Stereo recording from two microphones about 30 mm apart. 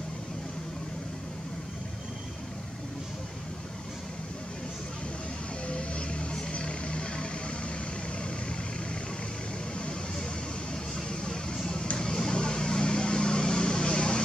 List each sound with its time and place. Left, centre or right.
5.7 s music: left
11.5 s vehicle: left